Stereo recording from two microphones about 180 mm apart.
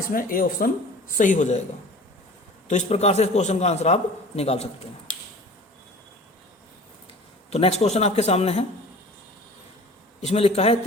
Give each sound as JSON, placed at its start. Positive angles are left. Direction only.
{"t": 0.1, "sound": "speech", "side_deg": 50}
{"t": 2.6, "sound": "a man's voice", "side_deg": 40}
{"t": 7.5, "sound": "a man's voice", "side_deg": 35}
{"t": 10.2, "sound": "a man's voice", "side_deg": 35}